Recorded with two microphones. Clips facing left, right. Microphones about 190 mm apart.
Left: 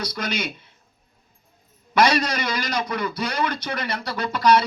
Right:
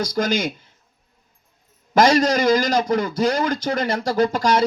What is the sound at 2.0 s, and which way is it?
Speech, 45° right (ahead or behind).